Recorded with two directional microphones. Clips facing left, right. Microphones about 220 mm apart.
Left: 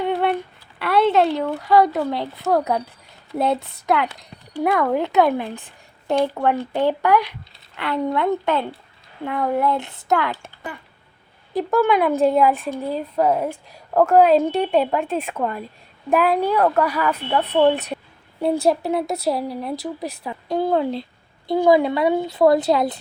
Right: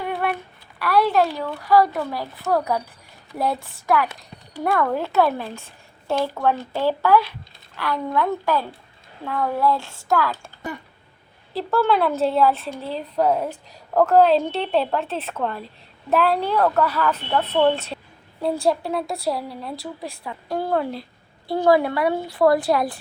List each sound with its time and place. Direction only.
0.0 s a sound: 25° left (ahead or behind)
0.8 s speech: 25° left (ahead or behind)
11.5 s speech: 15° left (ahead or behind)